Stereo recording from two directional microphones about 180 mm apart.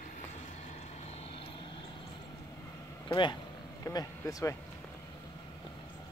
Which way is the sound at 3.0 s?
25° left (ahead or behind).